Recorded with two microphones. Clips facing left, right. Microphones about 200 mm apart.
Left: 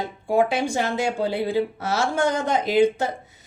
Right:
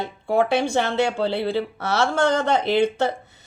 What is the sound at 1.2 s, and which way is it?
Speech, 15° left (ahead or behind).